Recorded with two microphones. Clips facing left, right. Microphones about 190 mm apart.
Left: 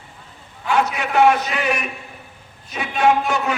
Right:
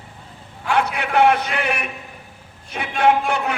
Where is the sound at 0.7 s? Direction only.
60° right (ahead or behind).